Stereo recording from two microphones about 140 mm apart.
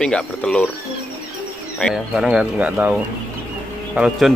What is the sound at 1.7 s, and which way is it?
Speech, centre (ahead or behind).